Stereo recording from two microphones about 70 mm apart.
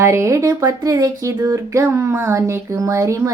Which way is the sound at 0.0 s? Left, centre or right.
Right.